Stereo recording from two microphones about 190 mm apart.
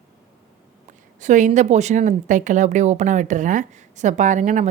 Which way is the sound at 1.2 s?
40° right (ahead or behind).